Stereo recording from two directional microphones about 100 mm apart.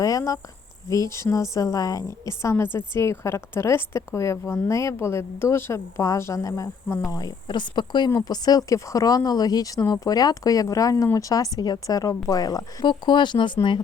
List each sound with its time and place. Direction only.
0.0 s cricket: 35° left (ahead or behind)
0.9 s a woman's voice: 35° left (ahead or behind)
7.4 s speech: 50° left (ahead or behind)
12.9 s speech: 50° left (ahead or behind)